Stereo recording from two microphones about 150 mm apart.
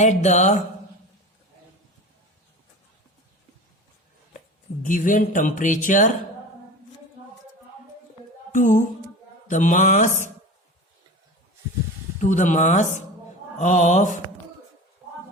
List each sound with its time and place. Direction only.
0.0 s mantra: 50° left (ahead or behind)
4.8 s speech: 60° left (ahead or behind)
8.5 s speech: 60° left (ahead or behind)
12.2 s speech: 55° left (ahead or behind)